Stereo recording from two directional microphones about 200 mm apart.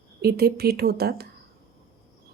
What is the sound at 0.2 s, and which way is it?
A woman's voice, 50° right (ahead or behind).